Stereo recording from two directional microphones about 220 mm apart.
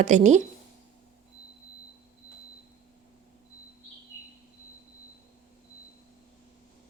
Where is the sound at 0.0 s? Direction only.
35° right (ahead or behind).